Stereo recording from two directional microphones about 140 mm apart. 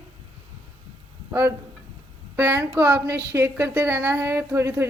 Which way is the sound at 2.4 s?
15° right (ahead or behind).